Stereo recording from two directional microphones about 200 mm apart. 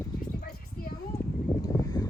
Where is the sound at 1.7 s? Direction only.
15° left (ahead or behind).